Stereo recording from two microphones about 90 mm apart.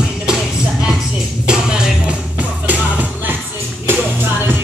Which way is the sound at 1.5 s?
10° right (ahead or behind).